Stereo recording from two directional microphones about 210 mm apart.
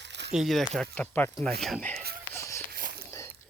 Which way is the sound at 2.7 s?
45° right (ahead or behind).